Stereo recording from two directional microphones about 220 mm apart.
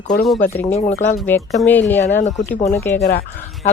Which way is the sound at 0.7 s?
35° left (ahead or behind).